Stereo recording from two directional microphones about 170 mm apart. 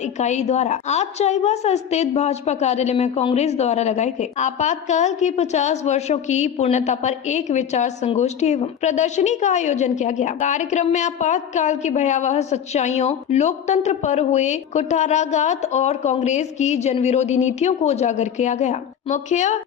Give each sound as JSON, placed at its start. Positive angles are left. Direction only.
{"t": 0.0, "sound": "a woman's voice", "side_deg": 40}